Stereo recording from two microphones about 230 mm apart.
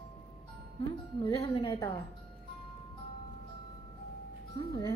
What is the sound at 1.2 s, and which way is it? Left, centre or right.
Speech, left.